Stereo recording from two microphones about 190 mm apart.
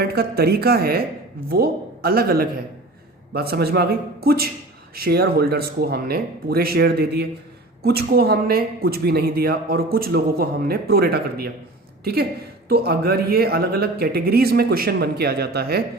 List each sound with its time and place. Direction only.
0.0 s speech: 55° right (ahead or behind)
12.6 s speech: 55° right (ahead or behind)